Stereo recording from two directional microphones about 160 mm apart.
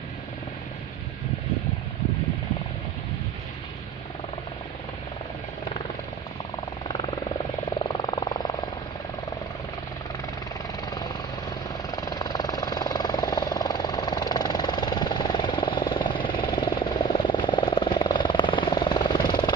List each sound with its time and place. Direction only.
7.8 s vehicle: 30° left (ahead or behind)
10.9 s vehicle: 25° left (ahead or behind)